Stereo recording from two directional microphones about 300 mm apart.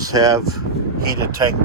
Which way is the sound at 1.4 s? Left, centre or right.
Centre.